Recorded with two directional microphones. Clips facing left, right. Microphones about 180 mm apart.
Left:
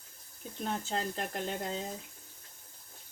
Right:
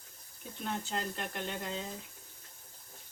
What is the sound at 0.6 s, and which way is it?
Speech, 35° left (ahead or behind).